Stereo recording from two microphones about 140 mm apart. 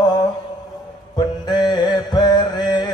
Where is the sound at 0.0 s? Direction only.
30° left (ahead or behind).